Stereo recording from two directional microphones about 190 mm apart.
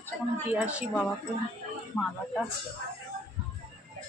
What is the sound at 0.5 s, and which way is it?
Speech, 5° right (ahead or behind).